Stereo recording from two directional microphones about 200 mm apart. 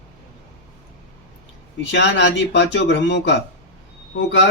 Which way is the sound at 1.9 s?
60° left (ahead or behind).